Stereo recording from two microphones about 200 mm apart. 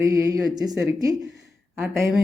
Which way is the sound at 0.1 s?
20° right (ahead or behind).